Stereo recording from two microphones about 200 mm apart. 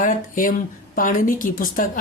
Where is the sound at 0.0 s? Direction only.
45° left (ahead or behind).